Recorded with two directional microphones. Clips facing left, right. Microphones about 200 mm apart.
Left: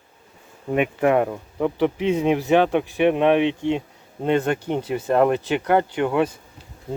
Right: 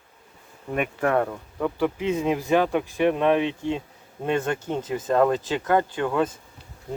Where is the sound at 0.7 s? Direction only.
15° left (ahead or behind).